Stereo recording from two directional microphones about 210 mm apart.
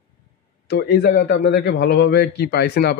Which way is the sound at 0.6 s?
55° left (ahead or behind).